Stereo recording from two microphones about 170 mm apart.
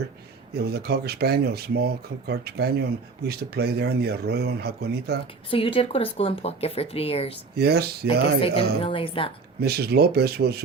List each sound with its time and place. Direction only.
0.5 s speech: 70° right (ahead or behind)
5.5 s speech: 30° left (ahead or behind)
7.5 s speech: 70° right (ahead or behind)
8.4 s speech: 30° left (ahead or behind)
9.6 s speech: 70° right (ahead or behind)